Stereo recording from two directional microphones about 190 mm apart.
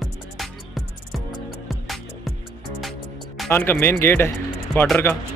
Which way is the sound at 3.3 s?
10° left (ahead or behind).